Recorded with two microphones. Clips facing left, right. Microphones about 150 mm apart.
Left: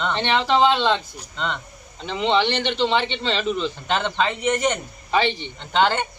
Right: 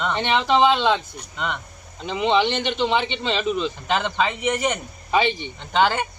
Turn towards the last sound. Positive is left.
turn(degrees=-5)  # may be behind; listen again after turning